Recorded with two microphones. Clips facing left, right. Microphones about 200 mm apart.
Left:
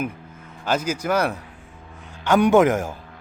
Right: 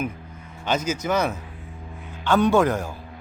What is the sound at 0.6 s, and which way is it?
A man's voice, 10° left (ahead or behind).